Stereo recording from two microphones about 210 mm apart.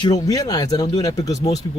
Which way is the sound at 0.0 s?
20° left (ahead or behind).